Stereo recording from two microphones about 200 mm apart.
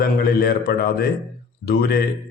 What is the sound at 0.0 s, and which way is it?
Speech, 50° left (ahead or behind).